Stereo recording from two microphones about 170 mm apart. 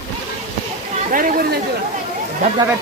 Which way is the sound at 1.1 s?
55° right (ahead or behind).